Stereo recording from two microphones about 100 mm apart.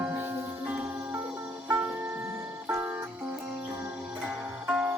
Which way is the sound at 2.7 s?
20° right (ahead or behind).